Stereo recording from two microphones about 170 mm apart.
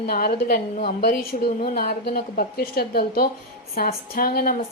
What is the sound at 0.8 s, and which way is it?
Speech, 35° left (ahead or behind).